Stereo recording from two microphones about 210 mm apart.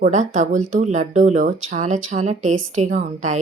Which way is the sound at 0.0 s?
35° right (ahead or behind).